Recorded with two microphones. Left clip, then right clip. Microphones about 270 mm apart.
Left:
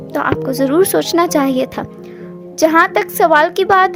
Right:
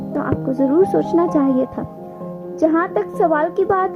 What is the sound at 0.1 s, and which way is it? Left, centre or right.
A woman's voice, left.